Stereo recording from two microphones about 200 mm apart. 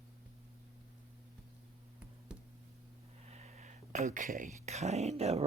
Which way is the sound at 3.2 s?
35° right (ahead or behind).